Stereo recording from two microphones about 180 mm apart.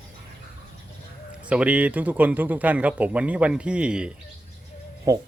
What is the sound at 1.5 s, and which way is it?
Speech, 5° right (ahead or behind).